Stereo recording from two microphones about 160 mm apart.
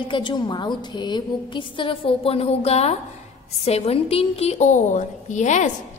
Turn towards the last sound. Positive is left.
turn(degrees=50)  # may be behind; listen again after turning